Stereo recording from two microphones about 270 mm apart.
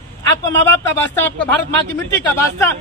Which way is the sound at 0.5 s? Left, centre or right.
Centre.